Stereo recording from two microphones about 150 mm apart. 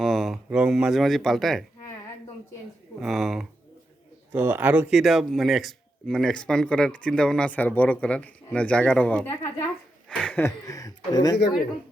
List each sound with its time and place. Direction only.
0.0 s speech: centre (ahead or behind)
3.0 s speech: centre (ahead or behind)
4.3 s speech: 10° right (ahead or behind); by 9.2 s 10° left (ahead or behind)
10.1 s a sound: 5° left (ahead or behind)
10.4 s speech: 25° left (ahead or behind)